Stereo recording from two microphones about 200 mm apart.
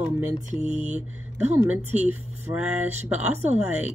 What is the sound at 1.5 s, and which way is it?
Speech, 10° right (ahead or behind).